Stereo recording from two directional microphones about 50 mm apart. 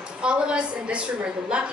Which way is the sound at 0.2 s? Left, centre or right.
Right.